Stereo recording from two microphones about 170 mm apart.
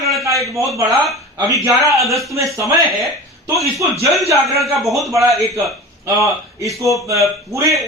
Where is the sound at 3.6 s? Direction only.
20° right (ahead or behind).